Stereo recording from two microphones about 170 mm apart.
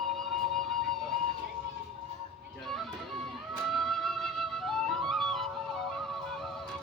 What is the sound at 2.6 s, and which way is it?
Music, centre (ahead or behind).